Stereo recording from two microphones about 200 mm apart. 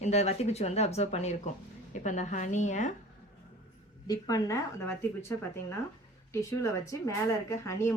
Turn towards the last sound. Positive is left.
turn(degrees=15)  # may be behind; listen again after turning